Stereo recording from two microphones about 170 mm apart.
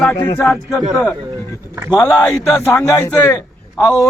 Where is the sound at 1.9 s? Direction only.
25° left (ahead or behind).